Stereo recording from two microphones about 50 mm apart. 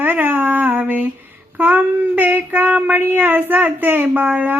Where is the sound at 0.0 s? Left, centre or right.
Right.